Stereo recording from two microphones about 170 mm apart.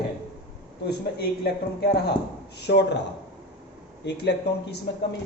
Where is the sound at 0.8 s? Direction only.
70° left (ahead or behind).